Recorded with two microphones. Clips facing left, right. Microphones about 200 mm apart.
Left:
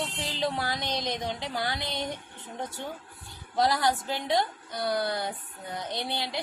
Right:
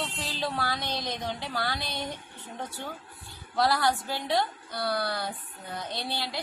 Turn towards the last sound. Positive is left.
turn(degrees=20)  # may be behind; listen again after turning